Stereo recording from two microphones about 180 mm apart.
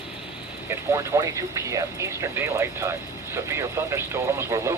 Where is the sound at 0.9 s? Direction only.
20° right (ahead or behind).